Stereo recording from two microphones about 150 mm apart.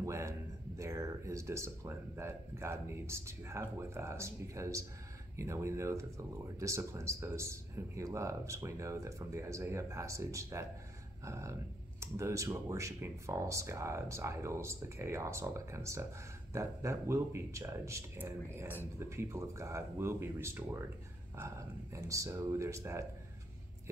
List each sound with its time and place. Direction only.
0.0 s speech: 20° right (ahead or behind)
21.9 s speech: 20° right (ahead or behind)